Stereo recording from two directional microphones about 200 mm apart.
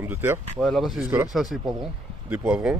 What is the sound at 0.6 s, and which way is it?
Speech, centre (ahead or behind).